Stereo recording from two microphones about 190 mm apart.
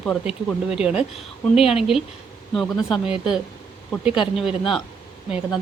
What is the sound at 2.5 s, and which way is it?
Speech, centre (ahead or behind).